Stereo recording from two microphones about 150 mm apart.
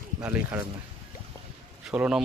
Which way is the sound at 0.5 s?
10° right (ahead or behind).